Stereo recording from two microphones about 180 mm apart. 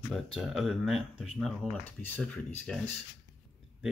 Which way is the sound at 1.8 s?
10° left (ahead or behind).